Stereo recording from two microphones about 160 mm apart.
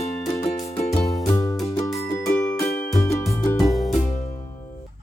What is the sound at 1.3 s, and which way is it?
Music, 20° left (ahead or behind).